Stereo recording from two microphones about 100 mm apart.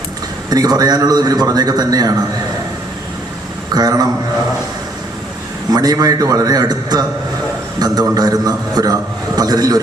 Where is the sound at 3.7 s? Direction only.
40° right (ahead or behind).